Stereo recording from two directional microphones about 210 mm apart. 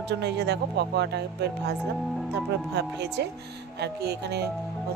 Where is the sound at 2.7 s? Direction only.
55° right (ahead or behind).